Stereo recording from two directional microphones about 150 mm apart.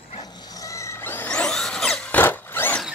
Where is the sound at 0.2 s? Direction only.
20° left (ahead or behind).